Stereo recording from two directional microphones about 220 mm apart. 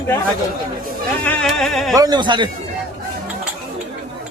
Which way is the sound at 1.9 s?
15° right (ahead or behind).